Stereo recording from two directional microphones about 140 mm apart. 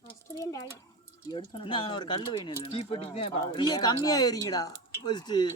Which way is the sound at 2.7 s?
45° left (ahead or behind).